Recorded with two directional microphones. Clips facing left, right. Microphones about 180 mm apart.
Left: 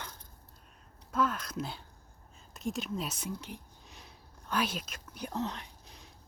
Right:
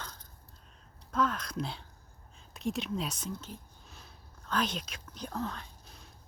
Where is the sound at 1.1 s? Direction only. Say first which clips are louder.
Even; 5° left (ahead or behind).